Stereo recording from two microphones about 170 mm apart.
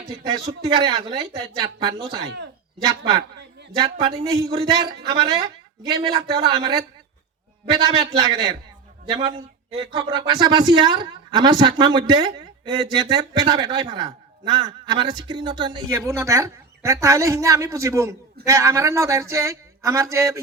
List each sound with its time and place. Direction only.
0.8 s speech: 25° right (ahead or behind)
9.7 s a man's voice: 25° right (ahead or behind)